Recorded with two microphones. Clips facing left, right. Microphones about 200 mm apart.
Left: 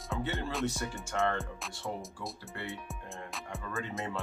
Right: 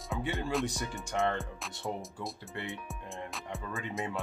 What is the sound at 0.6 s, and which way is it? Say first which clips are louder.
Speech: left 2 dB; 15° right (ahead or behind).